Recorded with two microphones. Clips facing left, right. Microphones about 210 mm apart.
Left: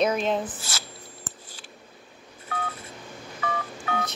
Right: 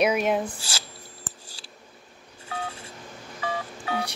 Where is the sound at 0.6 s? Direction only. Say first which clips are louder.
Even; 30° right (ahead or behind).